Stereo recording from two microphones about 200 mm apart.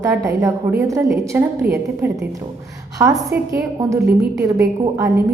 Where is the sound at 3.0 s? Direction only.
15° right (ahead or behind).